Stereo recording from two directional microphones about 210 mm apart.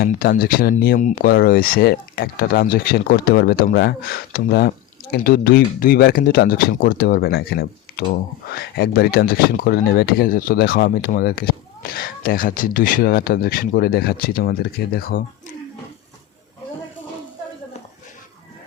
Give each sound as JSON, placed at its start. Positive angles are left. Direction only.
{"t": 0.0, "sound": "speech", "side_deg": 45}